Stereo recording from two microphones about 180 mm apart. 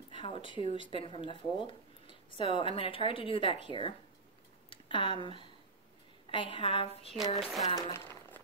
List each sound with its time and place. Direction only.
0.1 s a sound: 30° left (ahead or behind)
0.7 s speech: 30° left (ahead or behind)
7.3 s speech: centre (ahead or behind)
7.7 s speech: 20° left (ahead or behind)